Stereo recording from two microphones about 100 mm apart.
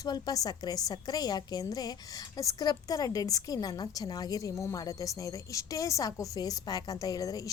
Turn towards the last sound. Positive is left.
turn(degrees=35)  # may be behind; listen again after turning